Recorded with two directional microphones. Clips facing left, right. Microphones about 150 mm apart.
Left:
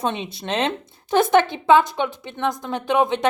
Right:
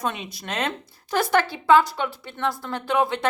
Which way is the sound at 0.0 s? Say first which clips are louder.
Left 4 dB; 25° left (ahead or behind).